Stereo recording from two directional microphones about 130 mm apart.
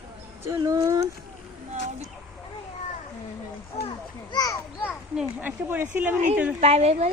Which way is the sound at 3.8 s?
35° left (ahead or behind).